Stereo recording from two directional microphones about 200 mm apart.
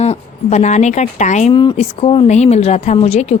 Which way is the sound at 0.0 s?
35° left (ahead or behind).